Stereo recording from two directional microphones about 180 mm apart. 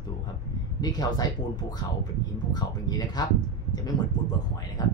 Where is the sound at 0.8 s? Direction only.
20° left (ahead or behind).